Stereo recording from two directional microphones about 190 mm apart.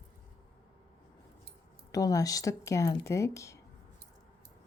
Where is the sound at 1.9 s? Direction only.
20° left (ahead or behind).